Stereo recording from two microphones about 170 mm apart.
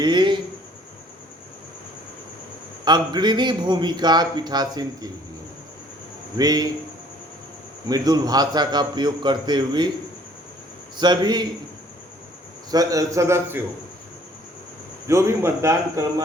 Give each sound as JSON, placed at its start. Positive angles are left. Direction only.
{"t": 0.0, "sound": "a sound", "side_deg": -25}
{"t": 2.8, "sound": "a man's voice", "side_deg": -25}
{"t": 6.3, "sound": "a man's voice", "side_deg": -20}
{"t": 7.9, "sound": "a man's voice", "side_deg": -20}
{"t": 10.9, "sound": "a man's voice", "side_deg": -25}
{"t": 12.7, "sound": "a man's voice", "side_deg": -20}
{"t": 15.0, "sound": "a man's voice", "side_deg": -15}